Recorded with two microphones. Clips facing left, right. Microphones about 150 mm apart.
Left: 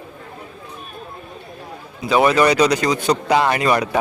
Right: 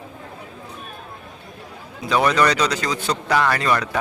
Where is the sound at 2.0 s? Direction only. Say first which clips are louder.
Left 3 dB; 5° left (ahead or behind).